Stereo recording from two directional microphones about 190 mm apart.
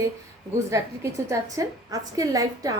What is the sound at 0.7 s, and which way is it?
A woman's voice, 15° right (ahead or behind).